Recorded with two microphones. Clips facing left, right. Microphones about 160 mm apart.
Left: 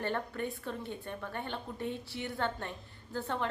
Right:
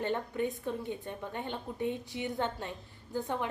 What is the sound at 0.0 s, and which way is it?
A woman's voice, 15° right (ahead or behind).